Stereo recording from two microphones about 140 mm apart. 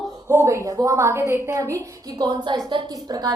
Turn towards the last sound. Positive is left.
turn(degrees=-30)  # may be behind; listen again after turning